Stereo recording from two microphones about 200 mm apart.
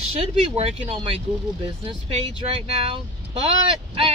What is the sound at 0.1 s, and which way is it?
Speech, 30° right (ahead or behind).